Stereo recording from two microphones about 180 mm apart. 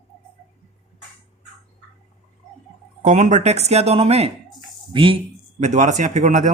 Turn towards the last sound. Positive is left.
turn(degrees=-45)  # may be behind; listen again after turning